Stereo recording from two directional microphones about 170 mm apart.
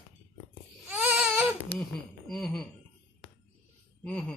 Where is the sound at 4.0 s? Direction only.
5° left (ahead or behind).